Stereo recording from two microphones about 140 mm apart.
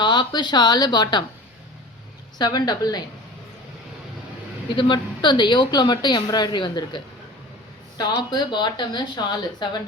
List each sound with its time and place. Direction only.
0.0 s speech: 35° left (ahead or behind)
2.4 s a woman's voice: 30° left (ahead or behind)
4.7 s speech: 35° left (ahead or behind)